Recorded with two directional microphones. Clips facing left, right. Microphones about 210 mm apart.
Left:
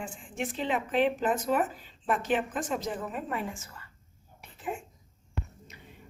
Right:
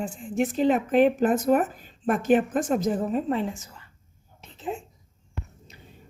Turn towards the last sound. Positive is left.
turn(degrees=-25)  # may be behind; listen again after turning